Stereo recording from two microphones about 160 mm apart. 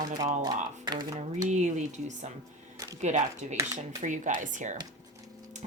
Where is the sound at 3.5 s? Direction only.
20° right (ahead or behind).